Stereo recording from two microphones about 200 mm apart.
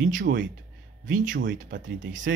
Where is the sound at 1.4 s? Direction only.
65° right (ahead or behind).